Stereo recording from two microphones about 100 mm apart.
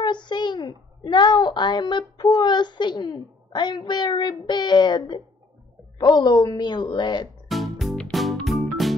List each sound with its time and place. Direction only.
0.0 s a child's voice: 50° left (ahead or behind)
7.4 s music: centre (ahead or behind)